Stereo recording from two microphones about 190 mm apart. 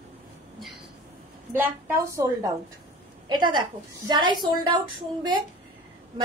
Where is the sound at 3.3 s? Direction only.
25° right (ahead or behind).